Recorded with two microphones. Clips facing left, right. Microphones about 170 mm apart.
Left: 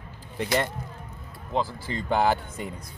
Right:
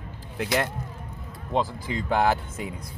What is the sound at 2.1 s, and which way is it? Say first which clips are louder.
Speech: even; centre (ahead or behind).